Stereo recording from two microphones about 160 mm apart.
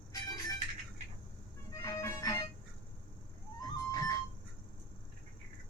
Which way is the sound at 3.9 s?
20° left (ahead or behind).